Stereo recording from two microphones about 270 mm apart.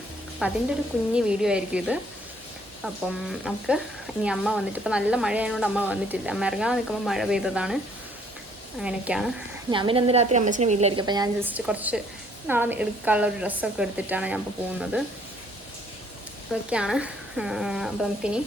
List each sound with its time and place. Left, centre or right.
0.4 s speech: centre
8.8 s speech: centre
9.6 s a woman's voice: centre
16.5 s speech: centre